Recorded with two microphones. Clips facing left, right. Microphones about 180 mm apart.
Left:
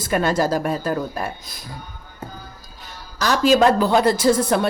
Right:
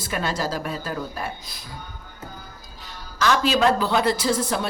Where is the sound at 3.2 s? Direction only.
40° left (ahead or behind).